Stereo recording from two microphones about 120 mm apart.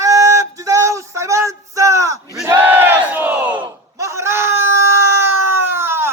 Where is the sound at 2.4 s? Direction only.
20° right (ahead or behind).